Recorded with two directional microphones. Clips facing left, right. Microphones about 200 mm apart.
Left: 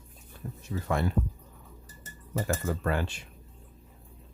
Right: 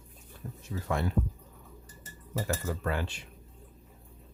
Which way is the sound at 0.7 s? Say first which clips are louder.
Left 3 dB; 55° left (ahead or behind).